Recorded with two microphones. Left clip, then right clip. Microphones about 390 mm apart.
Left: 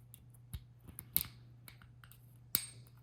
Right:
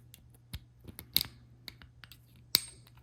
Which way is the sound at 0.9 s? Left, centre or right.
Right.